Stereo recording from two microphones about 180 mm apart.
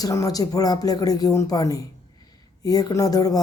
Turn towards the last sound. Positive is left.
turn(degrees=20)  # may be behind; listen again after turning